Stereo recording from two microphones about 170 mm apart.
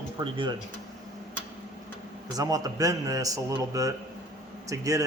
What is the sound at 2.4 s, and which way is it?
A man's voice, 20° right (ahead or behind).